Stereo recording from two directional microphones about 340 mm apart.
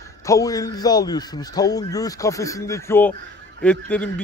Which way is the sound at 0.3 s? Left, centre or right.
Centre.